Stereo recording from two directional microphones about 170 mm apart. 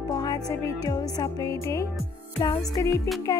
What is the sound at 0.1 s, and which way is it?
Music, 20° left (ahead or behind).